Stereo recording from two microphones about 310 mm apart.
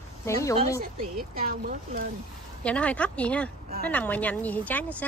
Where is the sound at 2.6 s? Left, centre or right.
Centre.